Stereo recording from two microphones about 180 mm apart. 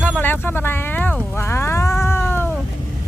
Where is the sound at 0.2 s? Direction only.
10° left (ahead or behind).